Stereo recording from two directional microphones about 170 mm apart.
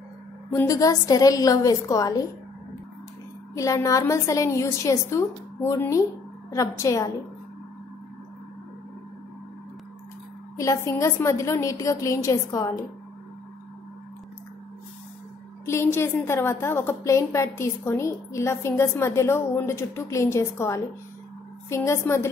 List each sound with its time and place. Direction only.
0.5 s a woman's voice: 20° left (ahead or behind)
3.5 s a woman's voice: 20° left (ahead or behind)
10.6 s a woman's voice: 20° left (ahead or behind)
15.6 s a woman's voice: 15° left (ahead or behind)